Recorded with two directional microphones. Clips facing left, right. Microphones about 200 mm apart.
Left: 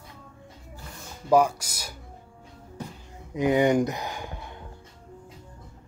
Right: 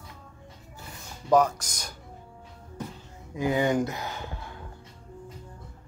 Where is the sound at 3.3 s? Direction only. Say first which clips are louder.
Left 4 dB; 20° left (ahead or behind).